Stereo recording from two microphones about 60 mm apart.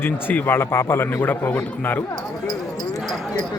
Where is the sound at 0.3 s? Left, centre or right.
Left.